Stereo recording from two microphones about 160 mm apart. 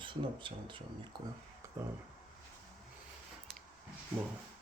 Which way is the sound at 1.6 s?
15° right (ahead or behind).